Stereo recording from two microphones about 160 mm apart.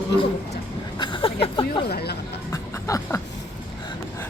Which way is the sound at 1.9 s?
80° left.